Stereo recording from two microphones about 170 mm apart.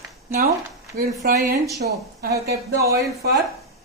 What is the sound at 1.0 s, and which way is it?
Speech, 60° right (ahead or behind).